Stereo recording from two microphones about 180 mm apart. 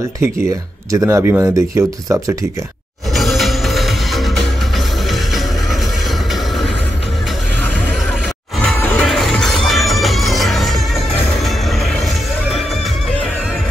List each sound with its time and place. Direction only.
0.9 s speech: 15° right (ahead or behind)
3.2 s music: centre (ahead or behind)
8.6 s music: 5° left (ahead or behind)